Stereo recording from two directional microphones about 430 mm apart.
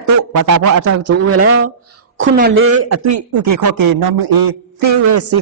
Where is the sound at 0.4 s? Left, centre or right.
Right.